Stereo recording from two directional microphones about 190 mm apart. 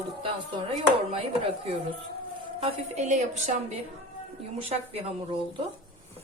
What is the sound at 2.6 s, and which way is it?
A woman's voice, 35° right (ahead or behind).